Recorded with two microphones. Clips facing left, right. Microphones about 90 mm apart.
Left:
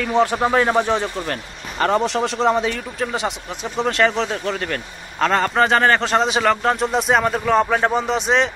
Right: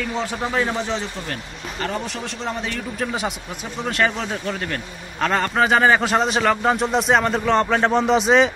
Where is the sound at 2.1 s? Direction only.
90° left.